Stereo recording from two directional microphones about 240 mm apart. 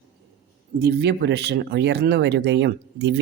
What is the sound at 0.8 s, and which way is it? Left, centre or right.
Speech, right.